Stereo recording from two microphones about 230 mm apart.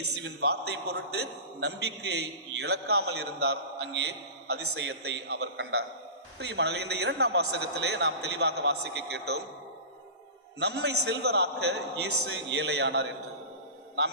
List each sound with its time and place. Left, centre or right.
0.2 s a man's voice: right
10.6 s a man's voice: right